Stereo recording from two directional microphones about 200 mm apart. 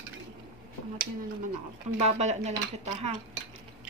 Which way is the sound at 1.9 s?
30° right (ahead or behind).